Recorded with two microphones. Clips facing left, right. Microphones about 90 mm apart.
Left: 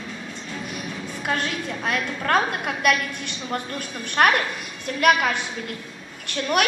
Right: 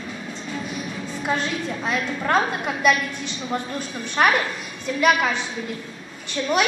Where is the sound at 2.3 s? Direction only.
Centre (ahead or behind).